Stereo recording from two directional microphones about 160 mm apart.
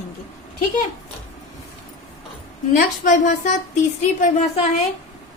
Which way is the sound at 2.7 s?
50° left (ahead or behind).